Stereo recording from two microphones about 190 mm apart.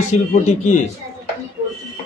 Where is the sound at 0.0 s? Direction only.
40° left (ahead or behind).